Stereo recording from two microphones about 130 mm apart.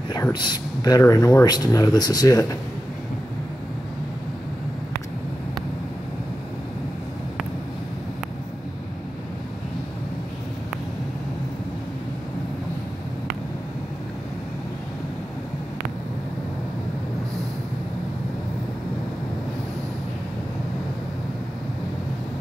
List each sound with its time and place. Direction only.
0.1 s speech: 35° left (ahead or behind)